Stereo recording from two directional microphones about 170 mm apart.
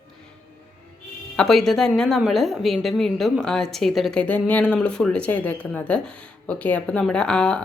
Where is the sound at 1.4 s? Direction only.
Centre (ahead or behind).